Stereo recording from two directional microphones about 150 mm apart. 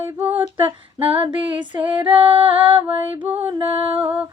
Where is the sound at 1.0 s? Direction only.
35° right (ahead or behind).